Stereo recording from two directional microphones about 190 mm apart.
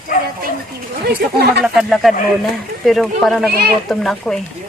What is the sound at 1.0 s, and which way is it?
Speech, 55° right (ahead or behind).